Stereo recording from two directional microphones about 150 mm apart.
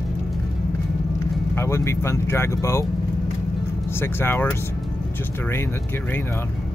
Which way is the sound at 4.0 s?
15° left (ahead or behind).